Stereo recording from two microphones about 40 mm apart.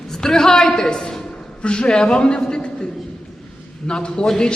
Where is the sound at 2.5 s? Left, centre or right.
Left.